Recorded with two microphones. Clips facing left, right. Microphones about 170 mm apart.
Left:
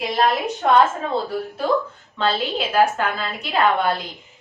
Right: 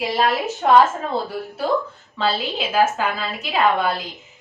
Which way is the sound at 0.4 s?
Centre (ahead or behind).